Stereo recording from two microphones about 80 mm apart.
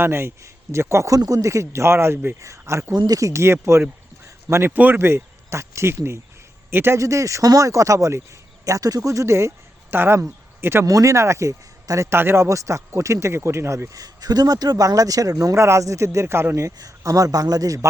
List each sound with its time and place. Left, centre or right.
0.0 s a man's voice: right
2.9 s a man's voice: right
4.7 s a man's voice: right
7.0 s speech: right
10.8 s a man's voice: right
12.1 s a man's voice: right
13.9 s speech: right
16.7 s speech: right